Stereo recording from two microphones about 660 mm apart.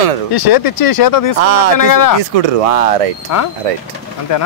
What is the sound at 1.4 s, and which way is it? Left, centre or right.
Speech, right.